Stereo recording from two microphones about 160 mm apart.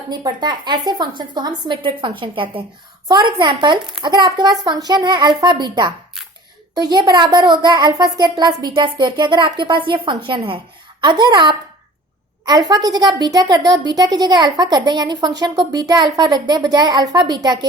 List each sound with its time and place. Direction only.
0.1 s speech: 30° right (ahead or behind)